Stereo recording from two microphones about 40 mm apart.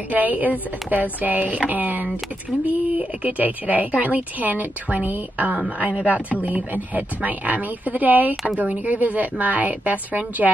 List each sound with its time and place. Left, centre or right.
0.1 s a woman's voice: right